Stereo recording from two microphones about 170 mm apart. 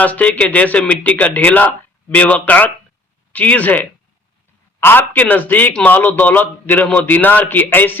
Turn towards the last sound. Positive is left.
turn(degrees=10)  # may be behind; listen again after turning